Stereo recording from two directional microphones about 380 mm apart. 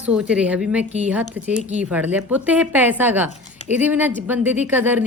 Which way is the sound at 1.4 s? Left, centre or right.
Centre.